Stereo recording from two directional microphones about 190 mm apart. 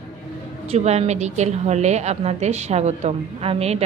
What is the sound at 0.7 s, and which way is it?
A woman's voice, 35° right (ahead or behind).